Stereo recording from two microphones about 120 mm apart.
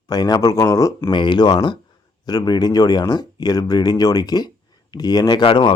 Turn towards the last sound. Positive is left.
turn(degrees=45)  # may be behind; listen again after turning